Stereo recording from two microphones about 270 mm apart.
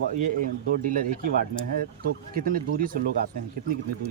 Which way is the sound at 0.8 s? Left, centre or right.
Right.